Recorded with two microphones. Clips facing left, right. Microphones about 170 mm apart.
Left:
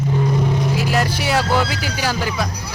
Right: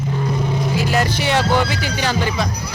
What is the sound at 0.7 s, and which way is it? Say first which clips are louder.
Music: right 1 dB; centre (ahead or behind).